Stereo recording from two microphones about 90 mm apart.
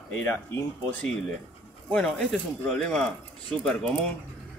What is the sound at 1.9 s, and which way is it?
Speech, 5° left (ahead or behind).